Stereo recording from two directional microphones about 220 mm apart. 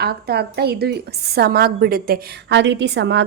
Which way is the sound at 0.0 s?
45° right (ahead or behind).